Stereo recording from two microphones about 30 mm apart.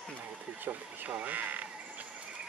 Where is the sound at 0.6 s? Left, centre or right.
Right.